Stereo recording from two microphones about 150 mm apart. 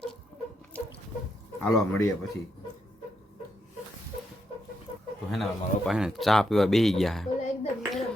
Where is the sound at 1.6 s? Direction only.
15° left (ahead or behind).